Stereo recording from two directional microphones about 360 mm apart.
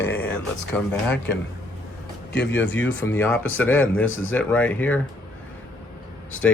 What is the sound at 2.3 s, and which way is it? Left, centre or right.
Speech, left.